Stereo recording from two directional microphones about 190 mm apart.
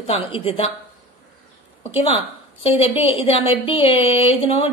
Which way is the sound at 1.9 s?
30° left (ahead or behind).